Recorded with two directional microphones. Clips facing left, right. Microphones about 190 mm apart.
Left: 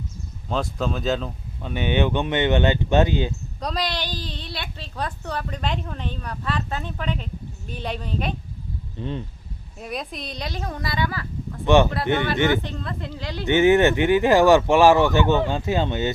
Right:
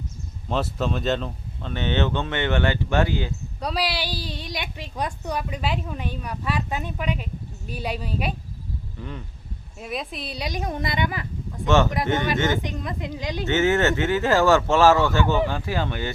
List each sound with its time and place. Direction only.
0.4 s speech: centre (ahead or behind)
1.6 s speech: 10° left (ahead or behind)
3.6 s a woman's voice: 5° right (ahead or behind)
9.0 s speech: 25° left (ahead or behind)
9.8 s a woman's voice: centre (ahead or behind); by 11.3 s 20° right (ahead or behind)
11.6 s speech: 15° left (ahead or behind)
12.5 s a woman's voice: 15° right (ahead or behind)
13.4 s speech: 15° left (ahead or behind)